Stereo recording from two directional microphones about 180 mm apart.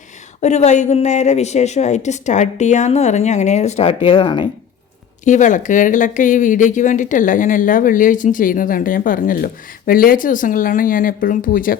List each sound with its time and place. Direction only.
0.4 s a woman's voice: 40° left (ahead or behind)
5.2 s speech: 45° left (ahead or behind)